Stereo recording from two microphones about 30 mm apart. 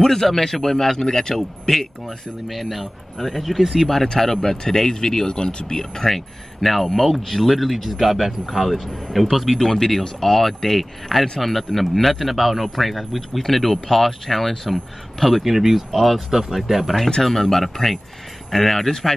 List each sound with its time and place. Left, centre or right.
0.0 s speech: centre
1.0 s speech: left
1.3 s speech: centre; by 5.8 s left
5.8 s speech: centre
6.1 s speech: centre
9.6 s speech: centre
17.2 s speech: centre